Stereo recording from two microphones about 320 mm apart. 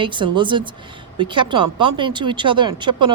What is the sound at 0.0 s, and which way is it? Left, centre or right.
Speech, centre.